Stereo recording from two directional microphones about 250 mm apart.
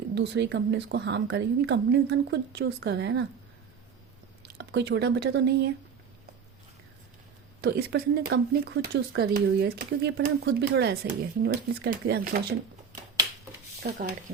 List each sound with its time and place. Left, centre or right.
0.1 s a woman's voice: right
4.4 s speech: right
7.6 s speech: right
13.8 s speech: right